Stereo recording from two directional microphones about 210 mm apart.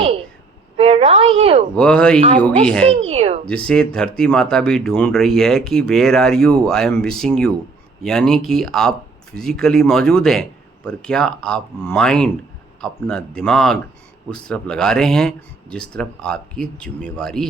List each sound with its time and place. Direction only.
0.8 s a woman's voice: 30° right (ahead or behind)
1.7 s speech: 5° left (ahead or behind)
3.1 s speech: 30° right (ahead or behind)
3.5 s speech: 5° left (ahead or behind)